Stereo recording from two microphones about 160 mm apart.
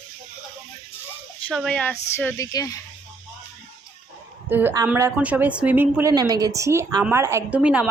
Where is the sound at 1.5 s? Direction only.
Centre (ahead or behind); by 2.7 s 20° left (ahead or behind).